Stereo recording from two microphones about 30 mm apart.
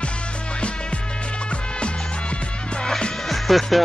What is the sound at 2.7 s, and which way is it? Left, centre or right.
Music, left.